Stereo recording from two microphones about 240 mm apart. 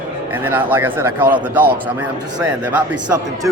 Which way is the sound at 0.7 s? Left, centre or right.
Centre.